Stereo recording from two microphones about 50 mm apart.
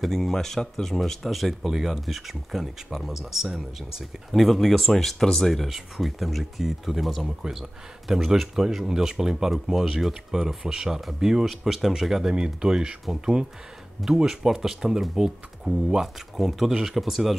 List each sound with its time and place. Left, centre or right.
0.0 s speech: centre